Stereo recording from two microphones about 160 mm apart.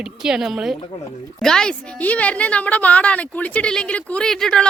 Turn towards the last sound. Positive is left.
turn(degrees=5)  # may be behind; listen again after turning